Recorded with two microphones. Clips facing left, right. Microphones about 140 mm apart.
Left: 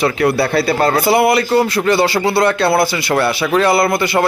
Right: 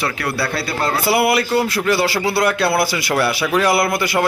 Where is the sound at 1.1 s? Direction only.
5° right (ahead or behind).